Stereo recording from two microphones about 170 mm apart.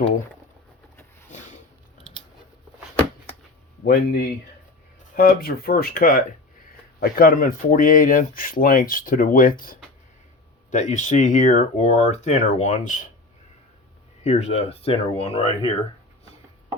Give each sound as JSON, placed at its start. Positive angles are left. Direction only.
{"t": 1.3, "sound": "a sound", "side_deg": 45}
{"t": 3.8, "sound": "speech", "side_deg": 65}
{"t": 14.3, "sound": "speech", "side_deg": 40}